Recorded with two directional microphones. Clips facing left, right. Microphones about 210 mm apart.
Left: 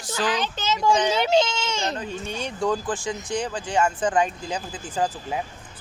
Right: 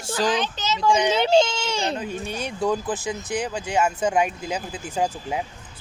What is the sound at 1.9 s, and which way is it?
Speech, 10° right (ahead or behind).